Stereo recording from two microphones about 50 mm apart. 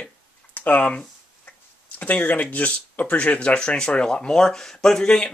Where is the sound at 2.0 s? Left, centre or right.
Left; by 5.3 s centre.